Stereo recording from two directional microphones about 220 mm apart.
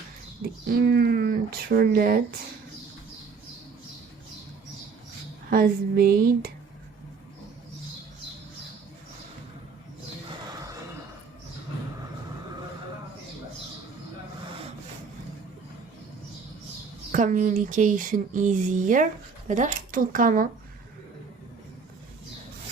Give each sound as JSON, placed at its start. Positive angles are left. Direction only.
{"t": 0.7, "sound": "speech", "side_deg": -45}
{"t": 5.5, "sound": "speech", "side_deg": -40}
{"t": 17.1, "sound": "speech", "side_deg": -35}